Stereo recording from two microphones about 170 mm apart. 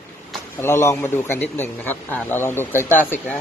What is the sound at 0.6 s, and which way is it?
A man's voice, 15° left (ahead or behind).